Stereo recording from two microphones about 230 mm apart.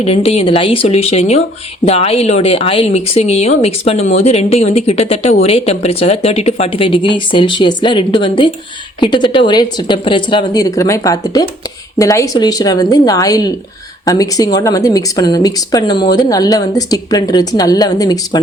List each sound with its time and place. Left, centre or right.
0.0 s speech: left